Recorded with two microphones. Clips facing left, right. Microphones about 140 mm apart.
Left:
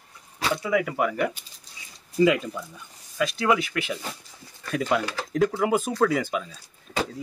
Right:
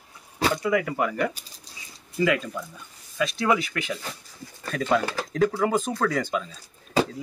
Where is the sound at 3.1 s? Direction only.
Centre (ahead or behind).